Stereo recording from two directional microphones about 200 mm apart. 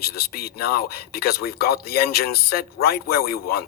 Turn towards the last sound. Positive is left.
turn(degrees=50)  # may be behind; listen again after turning